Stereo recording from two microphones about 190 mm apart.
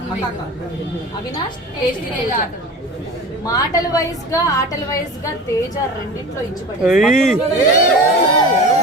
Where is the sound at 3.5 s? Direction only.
20° left (ahead or behind).